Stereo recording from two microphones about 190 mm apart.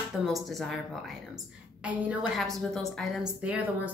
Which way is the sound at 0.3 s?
Centre (ahead or behind).